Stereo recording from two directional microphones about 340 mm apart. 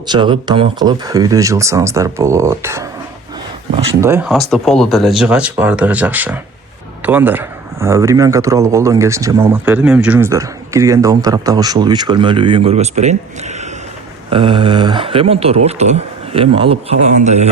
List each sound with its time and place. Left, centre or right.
0.1 s speech: centre
4.0 s speech: centre
14.3 s speech: centre